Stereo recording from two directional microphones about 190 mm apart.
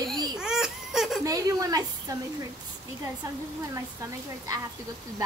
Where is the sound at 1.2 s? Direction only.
20° right (ahead or behind).